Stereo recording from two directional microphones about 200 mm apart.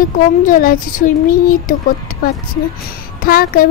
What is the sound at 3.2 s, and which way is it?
Speech, 45° left (ahead or behind).